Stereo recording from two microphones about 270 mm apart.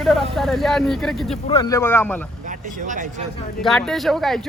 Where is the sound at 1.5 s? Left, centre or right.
Centre.